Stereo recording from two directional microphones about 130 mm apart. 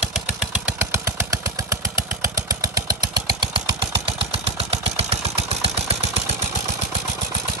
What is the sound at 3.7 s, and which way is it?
Engine, 45° right (ahead or behind).